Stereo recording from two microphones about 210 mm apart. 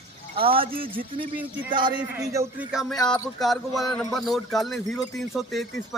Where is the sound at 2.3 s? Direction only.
10° right (ahead or behind).